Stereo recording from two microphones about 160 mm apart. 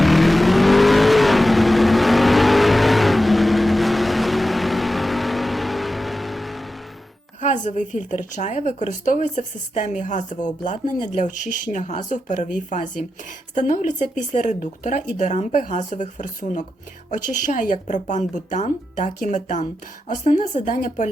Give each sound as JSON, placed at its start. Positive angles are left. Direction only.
{"t": 0.0, "sound": "vehicle", "side_deg": 0}
{"t": 7.4, "sound": "speech", "side_deg": 50}